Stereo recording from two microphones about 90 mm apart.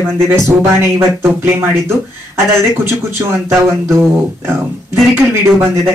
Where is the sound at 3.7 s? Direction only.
30° right (ahead or behind).